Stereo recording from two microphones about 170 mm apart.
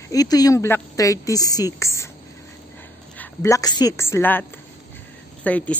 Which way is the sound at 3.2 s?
20° left (ahead or behind).